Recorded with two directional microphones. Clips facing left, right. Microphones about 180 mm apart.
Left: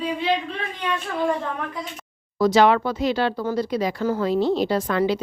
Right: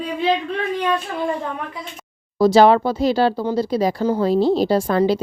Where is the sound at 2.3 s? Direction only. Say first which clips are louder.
Right 4 dB; 30° right (ahead or behind).